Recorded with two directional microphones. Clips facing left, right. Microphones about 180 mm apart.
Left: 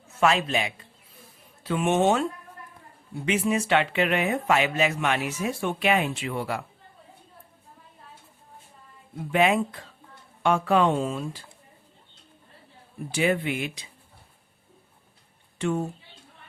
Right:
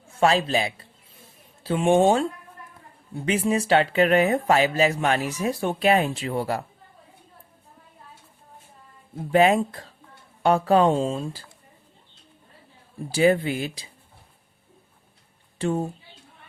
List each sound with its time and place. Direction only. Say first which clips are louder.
0.2 s speech: right 2 dB; 35° right (ahead or behind)
3.2 s speech: right 2 dB; 35° right (ahead or behind)
9.1 s speech: right 4 dB; 35° right (ahead or behind)
13.1 s speech: right 5 dB; 35° right (ahead or behind)
15.5 s a woman's voice: right 2 dB; 35° right (ahead or behind)